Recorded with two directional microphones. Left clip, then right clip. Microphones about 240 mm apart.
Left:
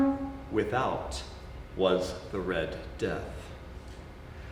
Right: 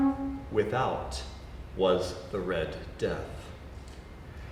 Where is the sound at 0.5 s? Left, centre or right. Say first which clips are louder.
Right 1 dB; centre.